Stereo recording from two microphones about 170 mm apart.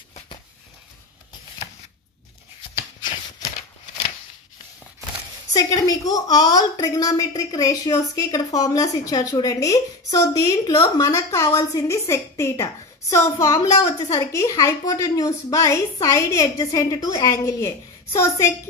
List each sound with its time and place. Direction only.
5.5 s a woman's voice: 20° left (ahead or behind)